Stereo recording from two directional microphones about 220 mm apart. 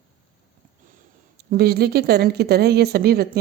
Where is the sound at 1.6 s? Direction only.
45° right (ahead or behind).